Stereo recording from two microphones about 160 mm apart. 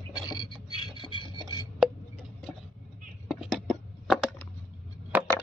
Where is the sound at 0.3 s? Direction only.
30° left (ahead or behind).